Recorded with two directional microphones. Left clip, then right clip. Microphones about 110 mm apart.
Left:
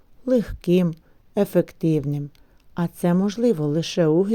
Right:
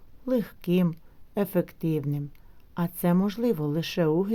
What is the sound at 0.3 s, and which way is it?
A woman's voice, 35° left (ahead or behind).